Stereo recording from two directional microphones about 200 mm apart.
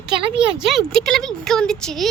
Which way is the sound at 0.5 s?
Centre (ahead or behind).